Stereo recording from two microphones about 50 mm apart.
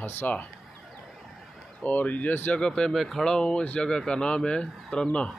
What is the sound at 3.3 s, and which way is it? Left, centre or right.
Speech, centre.